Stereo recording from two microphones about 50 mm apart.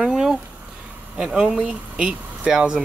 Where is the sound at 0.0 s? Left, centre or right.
Centre.